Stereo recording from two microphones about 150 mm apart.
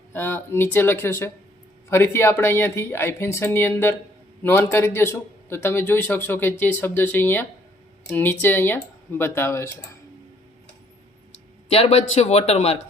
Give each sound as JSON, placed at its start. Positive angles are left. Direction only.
{"t": 0.1, "sound": "speech", "side_deg": 15}
{"t": 11.7, "sound": "speech", "side_deg": 45}